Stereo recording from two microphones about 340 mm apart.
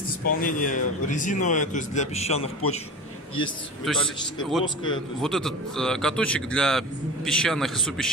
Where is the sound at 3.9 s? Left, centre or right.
Centre.